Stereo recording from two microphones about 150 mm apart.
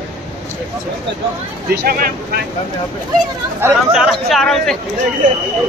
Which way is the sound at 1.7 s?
80° right.